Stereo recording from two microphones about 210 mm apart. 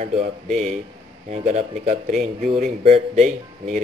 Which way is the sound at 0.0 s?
35° right (ahead or behind).